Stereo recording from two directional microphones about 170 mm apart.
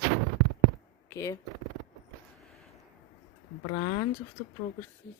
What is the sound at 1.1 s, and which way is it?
Speech, 20° left (ahead or behind).